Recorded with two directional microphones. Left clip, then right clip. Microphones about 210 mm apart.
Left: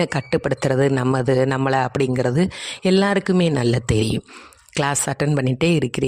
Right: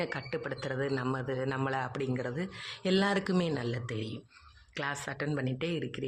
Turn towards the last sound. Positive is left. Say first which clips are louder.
# left 15 dB
turn(degrees=60)  # may be behind; listen again after turning